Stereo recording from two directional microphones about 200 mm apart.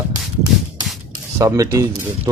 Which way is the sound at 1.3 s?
15° right (ahead or behind).